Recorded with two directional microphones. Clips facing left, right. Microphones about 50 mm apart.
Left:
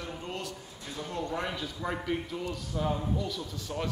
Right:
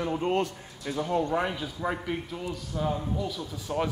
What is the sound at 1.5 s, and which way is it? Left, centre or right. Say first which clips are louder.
A man's voice: right 3 dB; centre.